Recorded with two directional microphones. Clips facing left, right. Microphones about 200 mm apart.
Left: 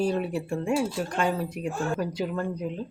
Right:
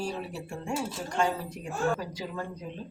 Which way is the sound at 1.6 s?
80° left.